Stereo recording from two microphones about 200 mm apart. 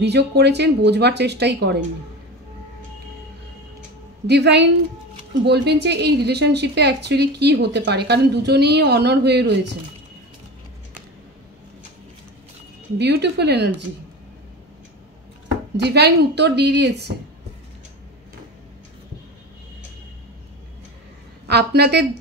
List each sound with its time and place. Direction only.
0.0 s a woman's voice: 55° right (ahead or behind)
4.3 s a woman's voice: 55° right (ahead or behind)
12.9 s a woman's voice: 55° right (ahead or behind)
15.8 s a woman's voice: 55° right (ahead or behind)
21.5 s a woman's voice: 55° right (ahead or behind)